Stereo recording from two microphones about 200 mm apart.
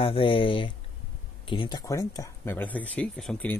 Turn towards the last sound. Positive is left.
turn(degrees=5)  # may be behind; listen again after turning